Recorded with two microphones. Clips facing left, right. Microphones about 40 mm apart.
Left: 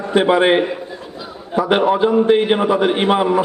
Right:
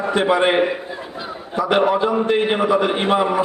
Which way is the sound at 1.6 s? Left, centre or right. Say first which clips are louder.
Left 2 dB; centre.